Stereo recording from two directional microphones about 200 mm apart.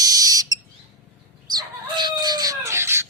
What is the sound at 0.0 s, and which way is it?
Bird, 20° right (ahead or behind).